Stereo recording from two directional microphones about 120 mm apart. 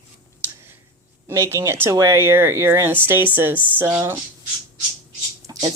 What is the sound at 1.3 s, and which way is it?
Speech, 20° right (ahead or behind).